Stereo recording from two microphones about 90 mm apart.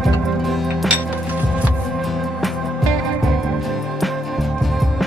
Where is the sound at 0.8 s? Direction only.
15° right (ahead or behind).